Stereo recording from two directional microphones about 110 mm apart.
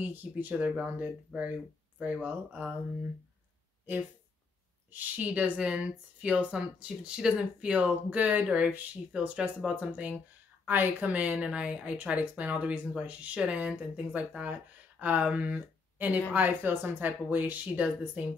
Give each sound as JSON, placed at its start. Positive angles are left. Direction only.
{"t": 0.1, "sound": "speech", "side_deg": -15}
{"t": 4.9, "sound": "speech", "side_deg": -15}